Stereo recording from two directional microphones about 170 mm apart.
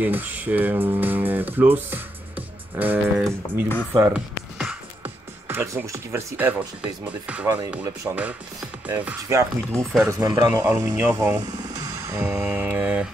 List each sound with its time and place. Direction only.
0.0 s speech: 10° right (ahead or behind)
4.1 s music: 5° right (ahead or behind)
5.5 s speech: 15° right (ahead or behind)
10.9 s speech: 10° right (ahead or behind)
11.3 s a sound: 25° right (ahead or behind)
12.4 s mantra: 10° right (ahead or behind)